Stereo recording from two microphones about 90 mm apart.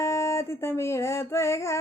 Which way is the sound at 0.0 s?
30° left (ahead or behind).